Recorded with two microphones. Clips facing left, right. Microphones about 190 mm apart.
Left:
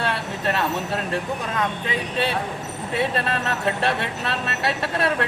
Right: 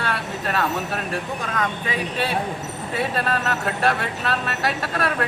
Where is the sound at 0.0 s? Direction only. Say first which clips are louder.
Left 2 dB; 25° left (ahead or behind).